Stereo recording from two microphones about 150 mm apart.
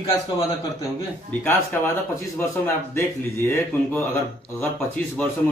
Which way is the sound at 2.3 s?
15° left (ahead or behind).